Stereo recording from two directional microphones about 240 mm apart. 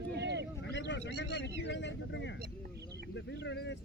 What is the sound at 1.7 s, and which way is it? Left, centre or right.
Speech, left.